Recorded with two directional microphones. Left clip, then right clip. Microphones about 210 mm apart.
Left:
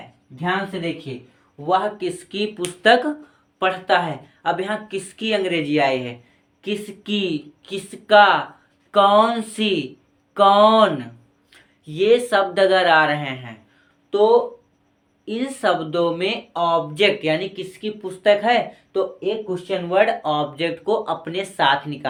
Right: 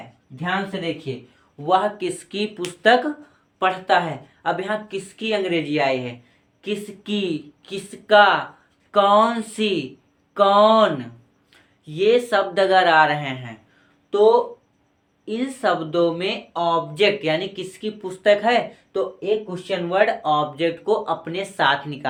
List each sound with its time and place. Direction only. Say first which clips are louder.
0.3 s speech: left 1 dB; 20° right (ahead or behind)
2.8 s speech: left 1 dB; 10° left (ahead or behind)
3.6 s speech: even; centre (ahead or behind)